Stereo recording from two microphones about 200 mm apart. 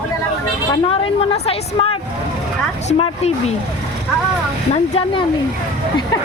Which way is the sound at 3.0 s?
30° left (ahead or behind).